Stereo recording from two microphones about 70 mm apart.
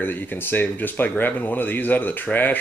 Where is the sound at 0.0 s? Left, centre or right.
Left.